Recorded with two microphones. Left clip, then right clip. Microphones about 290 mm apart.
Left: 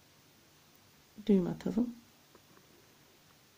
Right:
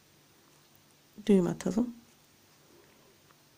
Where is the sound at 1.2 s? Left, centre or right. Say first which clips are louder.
Right 4 dB; centre.